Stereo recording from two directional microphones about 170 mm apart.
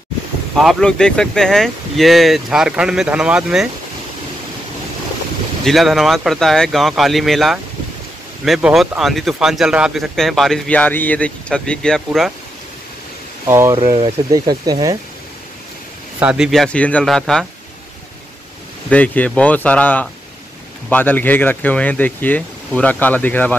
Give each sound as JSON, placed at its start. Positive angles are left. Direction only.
{"t": 0.6, "sound": "speech", "side_deg": 0}
{"t": 5.7, "sound": "speech", "side_deg": 0}
{"t": 13.5, "sound": "speech", "side_deg": -15}
{"t": 16.2, "sound": "speech", "side_deg": -5}
{"t": 18.9, "sound": "speech", "side_deg": 10}